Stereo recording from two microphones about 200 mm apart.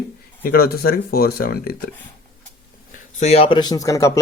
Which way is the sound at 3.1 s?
35° left (ahead or behind).